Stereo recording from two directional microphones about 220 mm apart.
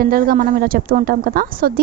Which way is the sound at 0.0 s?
40° right (ahead or behind).